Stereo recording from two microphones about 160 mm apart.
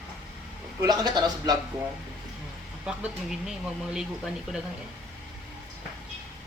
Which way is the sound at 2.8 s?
5° right (ahead or behind).